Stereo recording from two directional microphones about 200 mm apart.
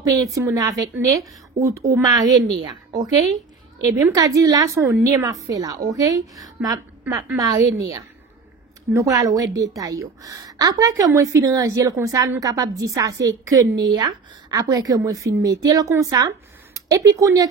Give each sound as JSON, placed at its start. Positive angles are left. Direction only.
{"t": 0.0, "sound": "a woman's voice", "side_deg": -15}